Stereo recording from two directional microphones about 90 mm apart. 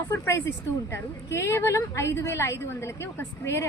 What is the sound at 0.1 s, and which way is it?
A woman's voice, 25° left (ahead or behind).